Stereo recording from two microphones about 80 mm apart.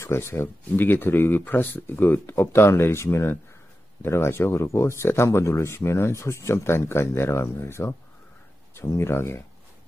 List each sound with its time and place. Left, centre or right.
0.0 s speech: left